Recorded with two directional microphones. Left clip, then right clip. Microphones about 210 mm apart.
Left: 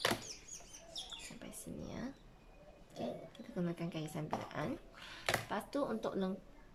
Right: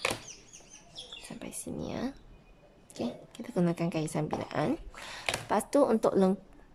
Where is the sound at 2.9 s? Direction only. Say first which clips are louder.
Right 6 dB; 25° right (ahead or behind).